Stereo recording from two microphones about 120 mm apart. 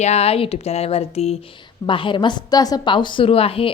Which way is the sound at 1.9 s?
45° left (ahead or behind).